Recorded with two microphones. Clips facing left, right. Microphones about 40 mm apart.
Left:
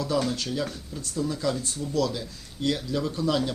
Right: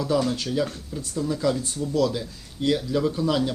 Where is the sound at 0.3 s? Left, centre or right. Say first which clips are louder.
Right 4 dB; centre.